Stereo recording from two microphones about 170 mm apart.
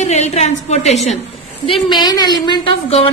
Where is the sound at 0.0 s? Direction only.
40° left (ahead or behind).